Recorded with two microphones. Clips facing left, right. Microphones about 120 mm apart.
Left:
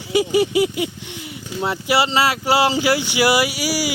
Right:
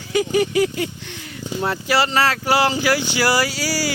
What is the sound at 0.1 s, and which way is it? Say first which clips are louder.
Speech: left 1 dB; 20° left (ahead or behind).